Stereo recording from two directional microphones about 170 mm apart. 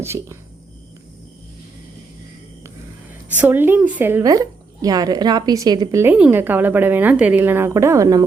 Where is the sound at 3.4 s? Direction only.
10° right (ahead or behind).